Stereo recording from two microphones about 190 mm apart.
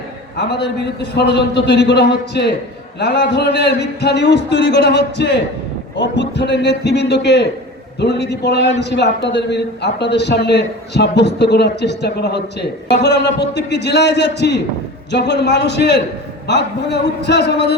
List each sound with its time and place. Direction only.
0.3 s a man's voice: 65° left (ahead or behind)